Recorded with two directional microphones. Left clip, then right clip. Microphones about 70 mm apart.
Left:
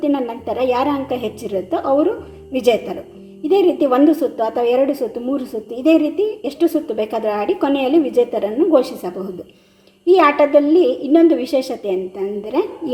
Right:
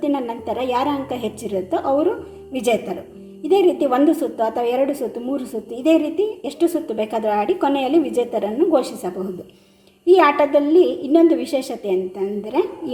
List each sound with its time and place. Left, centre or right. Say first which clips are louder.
0.0 s a woman's voice: left 3 dB; left